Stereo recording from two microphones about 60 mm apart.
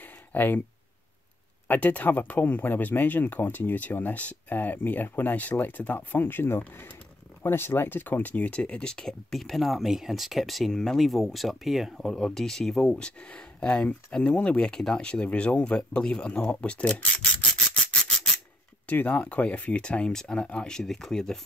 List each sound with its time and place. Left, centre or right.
0.0 s a sound: left
1.7 s speech: left
18.9 s speech: left; by 21.4 s centre